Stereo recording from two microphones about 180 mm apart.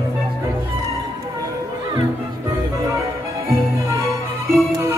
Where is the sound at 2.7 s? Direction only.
15° right (ahead or behind).